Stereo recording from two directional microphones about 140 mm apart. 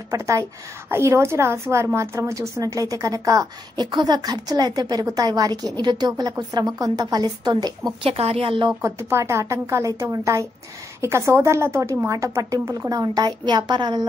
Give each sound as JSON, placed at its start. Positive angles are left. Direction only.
{"t": 0.1, "sound": "a woman's voice", "side_deg": -20}
{"t": 8.0, "sound": "speech", "side_deg": -45}
{"t": 8.8, "sound": "a woman's voice", "side_deg": -20}